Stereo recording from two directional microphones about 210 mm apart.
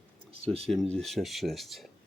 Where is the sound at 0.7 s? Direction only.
Centre (ahead or behind).